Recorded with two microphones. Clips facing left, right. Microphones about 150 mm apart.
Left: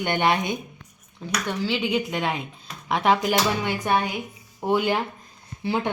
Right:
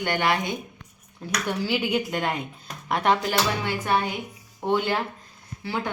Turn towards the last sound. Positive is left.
turn(degrees=20)  # may be behind; listen again after turning